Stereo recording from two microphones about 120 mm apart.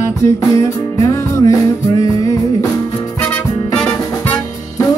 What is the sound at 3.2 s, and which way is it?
Music, 15° left (ahead or behind).